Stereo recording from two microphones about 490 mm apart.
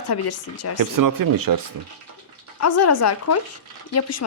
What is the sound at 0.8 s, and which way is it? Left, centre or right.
Speech, right.